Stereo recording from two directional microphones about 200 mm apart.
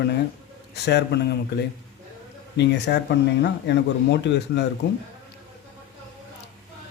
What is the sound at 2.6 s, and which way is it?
Speech, 60° left (ahead or behind).